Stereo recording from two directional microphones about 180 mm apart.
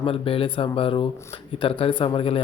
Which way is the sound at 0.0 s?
30° left (ahead or behind).